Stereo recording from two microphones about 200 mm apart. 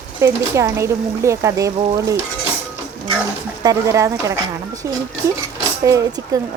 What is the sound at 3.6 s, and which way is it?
Speech, 15° right (ahead or behind).